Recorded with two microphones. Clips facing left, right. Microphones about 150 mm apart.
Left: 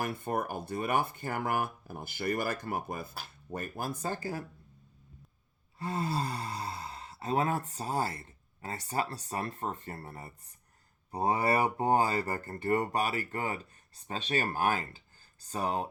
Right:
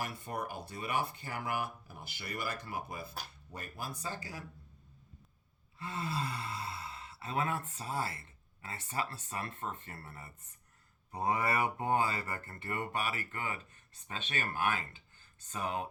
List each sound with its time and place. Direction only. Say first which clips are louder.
0.0 s speech: left 6 dB; 55° left (ahead or behind)
5.8 s speech: left 5 dB; 40° left (ahead or behind)